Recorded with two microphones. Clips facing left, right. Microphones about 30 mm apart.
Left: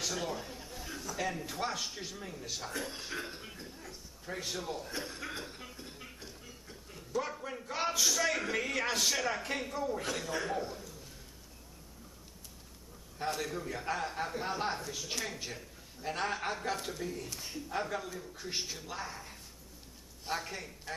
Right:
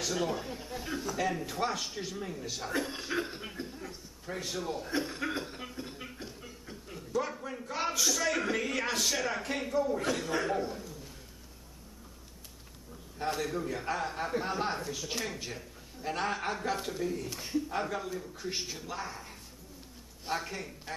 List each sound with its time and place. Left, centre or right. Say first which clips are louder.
0.0 s a man's voice: right 4 dB; centre
1.1 s speech: right 2 dB; centre
4.8 s speech: right 7 dB; centre
5.4 s a sound: right 5 dB; centre
7.0 s speech: right 3 dB; centre
13.2 s speech: right 3 dB; centre